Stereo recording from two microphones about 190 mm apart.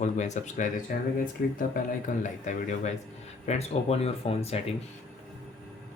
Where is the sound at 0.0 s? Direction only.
40° left (ahead or behind).